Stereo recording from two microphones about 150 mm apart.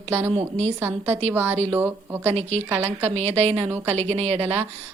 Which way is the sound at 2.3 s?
40° right (ahead or behind).